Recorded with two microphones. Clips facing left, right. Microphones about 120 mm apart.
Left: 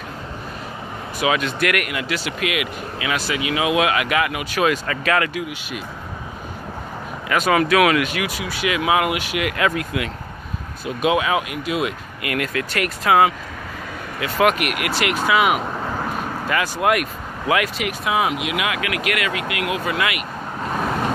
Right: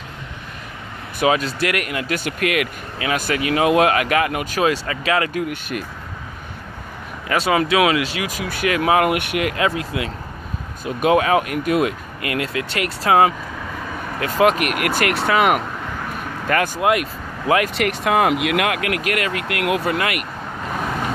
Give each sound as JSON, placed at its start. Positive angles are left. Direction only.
{"t": 1.2, "sound": "speech", "side_deg": -35}
{"t": 2.1, "sound": "speech", "side_deg": -50}
{"t": 4.6, "sound": "speech", "side_deg": -25}
{"t": 5.3, "sound": "speech", "side_deg": -50}
{"t": 7.2, "sound": "speech", "side_deg": -30}
{"t": 8.4, "sound": "speech", "side_deg": -50}
{"t": 9.1, "sound": "speech", "side_deg": -55}
{"t": 9.4, "sound": "speech", "side_deg": -30}
{"t": 11.0, "sound": "speech", "side_deg": -40}
{"t": 11.8, "sound": "speech", "side_deg": -30}
{"t": 16.8, "sound": "speech", "side_deg": -25}
{"t": 17.7, "sound": "speech", "side_deg": -65}
{"t": 19.9, "sound": "speech", "side_deg": -50}